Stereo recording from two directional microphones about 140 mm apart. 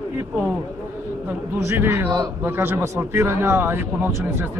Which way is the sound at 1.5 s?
20° right (ahead or behind).